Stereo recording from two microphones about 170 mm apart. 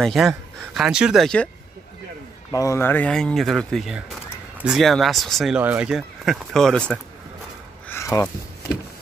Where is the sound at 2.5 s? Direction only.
15° left (ahead or behind).